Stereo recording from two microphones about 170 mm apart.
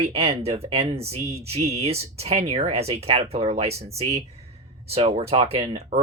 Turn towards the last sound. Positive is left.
turn(degrees=-35)  # may be behind; listen again after turning